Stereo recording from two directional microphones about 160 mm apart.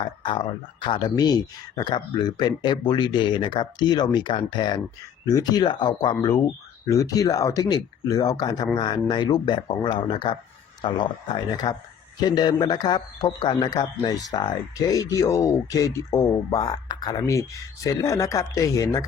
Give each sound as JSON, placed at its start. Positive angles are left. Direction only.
{"t": 0.0, "sound": "speech", "side_deg": 30}